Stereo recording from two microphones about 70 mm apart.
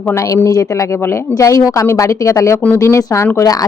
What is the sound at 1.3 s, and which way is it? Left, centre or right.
A woman's voice, left.